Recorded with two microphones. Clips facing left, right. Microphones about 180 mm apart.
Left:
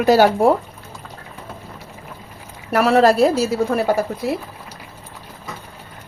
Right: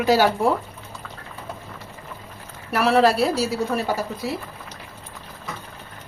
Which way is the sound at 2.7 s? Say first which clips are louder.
Left 4 dB; 45° left (ahead or behind).